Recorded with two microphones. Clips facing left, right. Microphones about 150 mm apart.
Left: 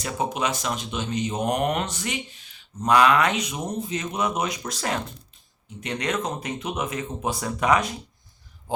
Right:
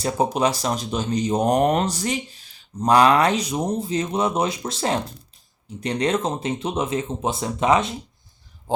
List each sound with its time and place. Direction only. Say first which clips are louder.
0.0 s speech: right 6 dB; 35° right (ahead or behind)